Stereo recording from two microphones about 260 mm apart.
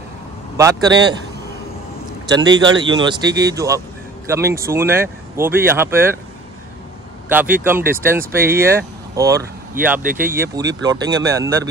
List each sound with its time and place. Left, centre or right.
2.2 s speech: centre
7.2 s speech: centre